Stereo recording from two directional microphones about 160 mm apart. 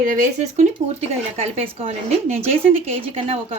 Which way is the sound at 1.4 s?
35° right (ahead or behind).